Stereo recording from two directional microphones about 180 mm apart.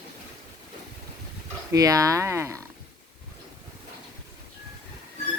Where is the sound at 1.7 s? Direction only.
20° right (ahead or behind).